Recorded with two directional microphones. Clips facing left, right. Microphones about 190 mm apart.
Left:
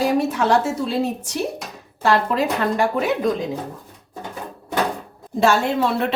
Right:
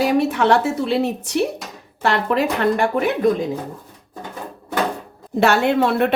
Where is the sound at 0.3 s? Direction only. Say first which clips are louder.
Right 2 dB; 65° right (ahead or behind).